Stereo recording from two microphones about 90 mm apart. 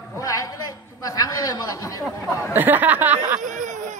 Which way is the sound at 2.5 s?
20° right (ahead or behind).